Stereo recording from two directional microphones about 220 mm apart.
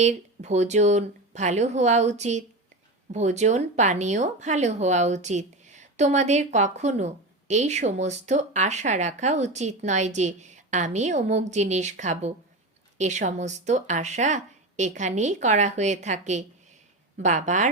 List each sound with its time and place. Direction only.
0.0 s speech: 30° right (ahead or behind)